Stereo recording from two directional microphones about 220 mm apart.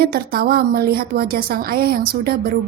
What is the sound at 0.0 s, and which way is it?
A woman's voice, 45° right (ahead or behind).